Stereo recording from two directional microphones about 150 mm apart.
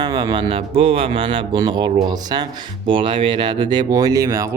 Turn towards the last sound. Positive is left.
turn(degrees=-20)  # may be behind; listen again after turning